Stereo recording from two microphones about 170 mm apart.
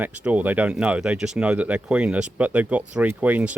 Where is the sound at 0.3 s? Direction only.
10° right (ahead or behind).